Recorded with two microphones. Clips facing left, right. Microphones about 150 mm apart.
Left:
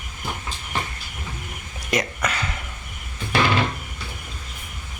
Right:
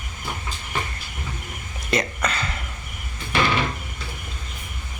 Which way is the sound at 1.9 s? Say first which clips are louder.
Even; 10° left (ahead or behind).